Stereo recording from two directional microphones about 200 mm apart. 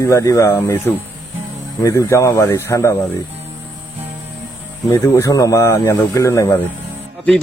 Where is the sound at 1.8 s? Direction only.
15° left (ahead or behind).